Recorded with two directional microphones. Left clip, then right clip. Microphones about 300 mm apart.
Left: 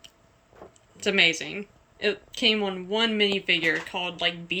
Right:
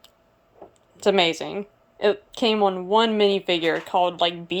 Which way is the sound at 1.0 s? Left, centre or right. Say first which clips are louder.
Right 2 dB; centre.